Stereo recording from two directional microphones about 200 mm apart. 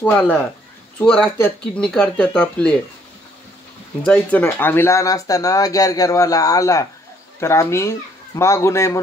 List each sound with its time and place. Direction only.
0.0 s speech: 10° left (ahead or behind)
4.0 s speech: 10° left (ahead or behind)